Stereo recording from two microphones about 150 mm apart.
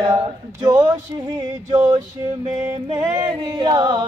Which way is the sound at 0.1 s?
25° right (ahead or behind).